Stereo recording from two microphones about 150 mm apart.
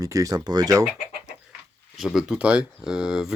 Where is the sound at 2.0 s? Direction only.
5° right (ahead or behind).